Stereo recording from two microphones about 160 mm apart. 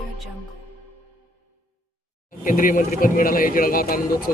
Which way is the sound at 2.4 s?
55° left (ahead or behind).